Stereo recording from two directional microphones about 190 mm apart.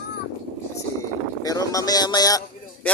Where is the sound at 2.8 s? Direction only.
5° left (ahead or behind).